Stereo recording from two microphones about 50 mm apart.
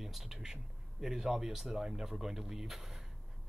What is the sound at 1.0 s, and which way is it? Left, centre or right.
Speech, centre.